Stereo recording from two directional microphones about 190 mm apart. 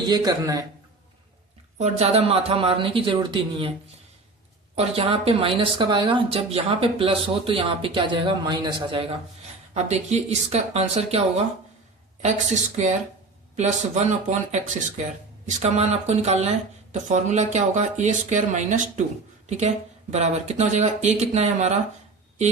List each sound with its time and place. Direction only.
0.1 s speech: 20° right (ahead or behind)
1.8 s speech: 35° right (ahead or behind)
4.7 s speech: 30° right (ahead or behind)
9.7 s speech: 35° right (ahead or behind)